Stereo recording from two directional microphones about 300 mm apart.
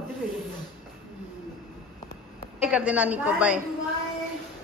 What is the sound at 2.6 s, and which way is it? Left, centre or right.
A woman's voice, centre.